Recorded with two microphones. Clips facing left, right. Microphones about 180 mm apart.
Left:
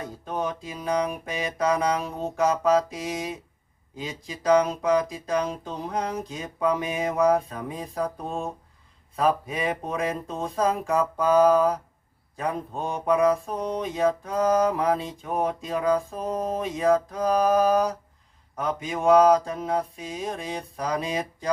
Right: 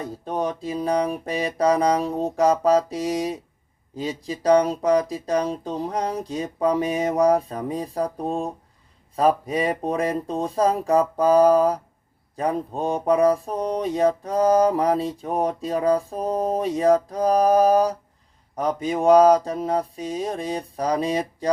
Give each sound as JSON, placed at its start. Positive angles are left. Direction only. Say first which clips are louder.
{"t": 0.3, "sound": "mantra", "louder": "right 4 dB", "side_deg": -35}